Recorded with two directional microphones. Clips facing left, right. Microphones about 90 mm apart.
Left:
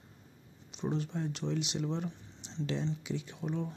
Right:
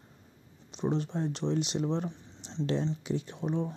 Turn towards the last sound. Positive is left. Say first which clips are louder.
# right 4 dB
turn(degrees=-35)  # may be behind; listen again after turning